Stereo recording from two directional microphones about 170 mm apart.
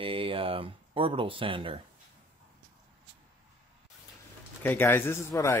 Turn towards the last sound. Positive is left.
turn(degrees=15)  # may be behind; listen again after turning